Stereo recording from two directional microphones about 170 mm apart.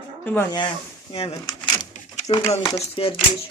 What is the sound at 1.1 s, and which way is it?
Speech, 35° left (ahead or behind).